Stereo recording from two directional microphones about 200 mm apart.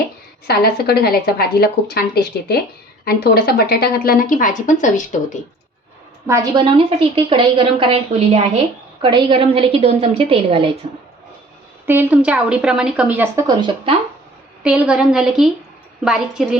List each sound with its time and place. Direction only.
0.4 s speech: 50° left (ahead or behind)
6.2 s a woman's voice: 15° right (ahead or behind)
11.9 s a woman's voice: 10° right (ahead or behind)
14.6 s a woman's voice: 5° right (ahead or behind)